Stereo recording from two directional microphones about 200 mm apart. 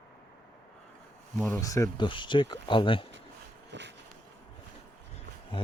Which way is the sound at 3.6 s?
60° right (ahead or behind).